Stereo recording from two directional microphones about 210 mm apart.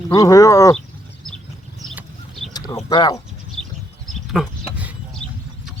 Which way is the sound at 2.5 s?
15° left (ahead or behind).